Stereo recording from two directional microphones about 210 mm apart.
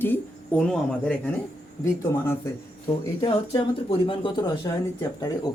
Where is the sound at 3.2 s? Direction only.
25° left (ahead or behind).